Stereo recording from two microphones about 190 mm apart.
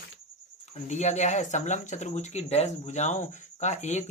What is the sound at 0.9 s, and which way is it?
Speech, 35° left (ahead or behind).